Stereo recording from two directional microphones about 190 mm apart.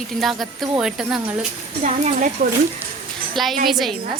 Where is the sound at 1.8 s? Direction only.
40° right (ahead or behind).